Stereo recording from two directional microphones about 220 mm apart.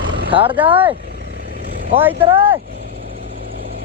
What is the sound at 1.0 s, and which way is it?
Vehicle, 50° right (ahead or behind).